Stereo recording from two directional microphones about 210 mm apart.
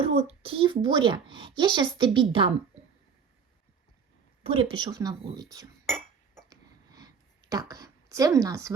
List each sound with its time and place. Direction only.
0.1 s a child's voice: 30° right (ahead or behind)
4.4 s a child's voice: 25° right (ahead or behind)
6.5 s hiccup: 20° right (ahead or behind)
7.7 s speech: 15° right (ahead or behind)